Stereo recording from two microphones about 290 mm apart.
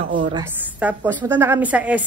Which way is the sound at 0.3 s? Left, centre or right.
Centre.